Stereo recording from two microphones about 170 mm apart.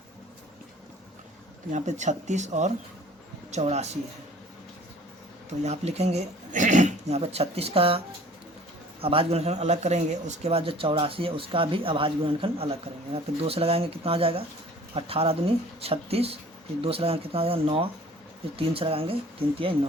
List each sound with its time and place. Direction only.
1.7 s a man's voice: 45° right (ahead or behind)
5.6 s a man's voice: 40° right (ahead or behind)